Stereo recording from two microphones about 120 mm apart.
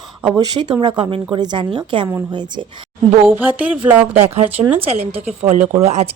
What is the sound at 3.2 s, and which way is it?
Speech, 15° right (ahead or behind).